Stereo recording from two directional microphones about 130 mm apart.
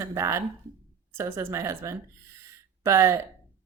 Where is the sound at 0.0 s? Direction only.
20° right (ahead or behind).